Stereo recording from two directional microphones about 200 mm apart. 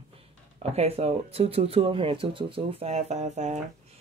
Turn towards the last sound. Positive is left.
turn(degrees=-35)  # may be behind; listen again after turning